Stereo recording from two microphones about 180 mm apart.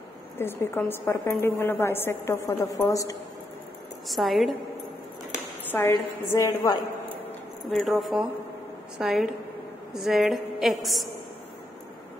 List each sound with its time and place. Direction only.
0.4 s a woman's voice: 15° left (ahead or behind)
4.1 s a woman's voice: centre (ahead or behind)
5.7 s a woman's voice: 15° left (ahead or behind)
7.7 s a woman's voice: centre (ahead or behind)